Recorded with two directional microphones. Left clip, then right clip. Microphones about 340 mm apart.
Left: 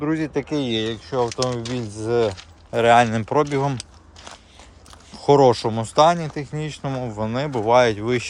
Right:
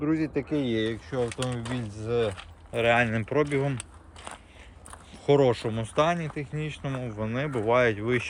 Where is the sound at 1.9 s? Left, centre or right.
Left.